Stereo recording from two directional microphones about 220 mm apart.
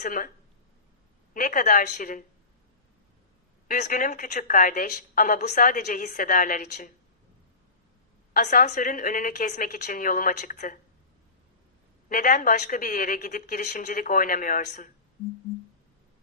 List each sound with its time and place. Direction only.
0.0 s a woman's voice: 40° left (ahead or behind)
1.3 s a woman's voice: 40° left (ahead or behind)
3.7 s a woman's voice: 35° left (ahead or behind)
8.3 s a woman's voice: 35° left (ahead or behind)
12.0 s a woman's voice: 35° left (ahead or behind)